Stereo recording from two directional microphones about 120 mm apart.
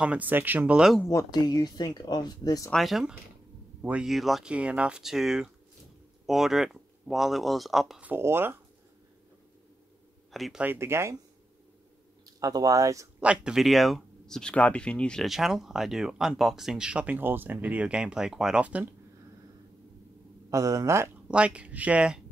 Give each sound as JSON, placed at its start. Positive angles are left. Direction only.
{"t": 0.0, "sound": "speech", "side_deg": -10}
{"t": 1.3, "sound": "speech", "side_deg": 35}
{"t": 2.7, "sound": "speech", "side_deg": 0}
{"t": 8.0, "sound": "speech", "side_deg": -15}
{"t": 10.3, "sound": "speech", "side_deg": 0}
{"t": 10.6, "sound": "speech", "side_deg": -20}
{"t": 12.3, "sound": "speech", "side_deg": -30}
{"t": 13.2, "sound": "speech", "side_deg": -10}
{"t": 20.4, "sound": "speech", "side_deg": -25}
{"t": 21.3, "sound": "speech", "side_deg": -10}